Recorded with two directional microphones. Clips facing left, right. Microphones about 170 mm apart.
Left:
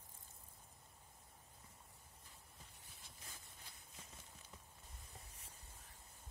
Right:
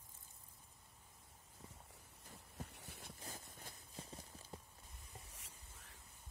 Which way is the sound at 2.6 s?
75° right (ahead or behind).